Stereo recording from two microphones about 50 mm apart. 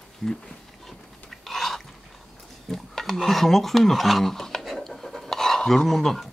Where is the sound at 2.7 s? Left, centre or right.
Centre.